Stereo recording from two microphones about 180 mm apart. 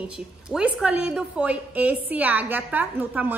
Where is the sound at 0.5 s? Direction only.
5° right (ahead or behind).